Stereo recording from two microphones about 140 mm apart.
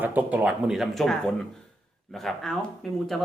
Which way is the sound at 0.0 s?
10° right (ahead or behind).